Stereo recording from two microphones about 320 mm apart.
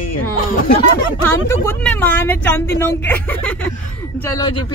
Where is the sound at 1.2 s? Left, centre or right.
Centre.